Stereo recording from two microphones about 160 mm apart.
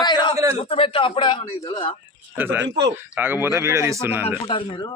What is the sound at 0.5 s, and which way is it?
A man's voice, 40° left (ahead or behind).